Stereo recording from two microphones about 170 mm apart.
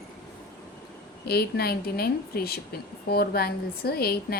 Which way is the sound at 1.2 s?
70° left (ahead or behind).